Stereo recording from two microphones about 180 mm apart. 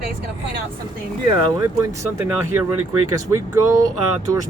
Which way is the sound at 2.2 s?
10° right (ahead or behind).